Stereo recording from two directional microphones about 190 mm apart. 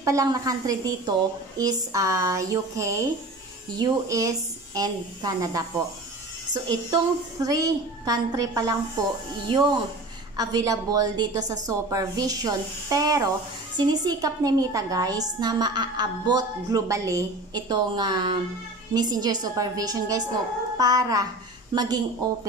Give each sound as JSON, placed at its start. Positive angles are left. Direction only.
{"t": 0.0, "sound": "a woman's voice", "side_deg": -15}
{"t": 10.3, "sound": "a woman's voice", "side_deg": -20}